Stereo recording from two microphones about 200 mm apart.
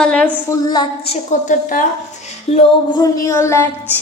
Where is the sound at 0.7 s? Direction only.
25° left (ahead or behind).